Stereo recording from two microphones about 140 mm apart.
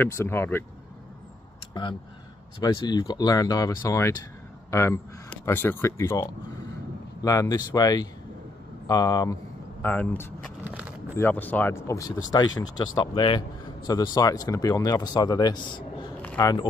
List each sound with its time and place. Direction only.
0.0 s speech: 15° left (ahead or behind)
1.7 s a man's voice: 35° left (ahead or behind)
9.8 s speech: 10° left (ahead or behind)
10.6 s a sound: 10° right (ahead or behind)
11.1 s speech: 15° left (ahead or behind)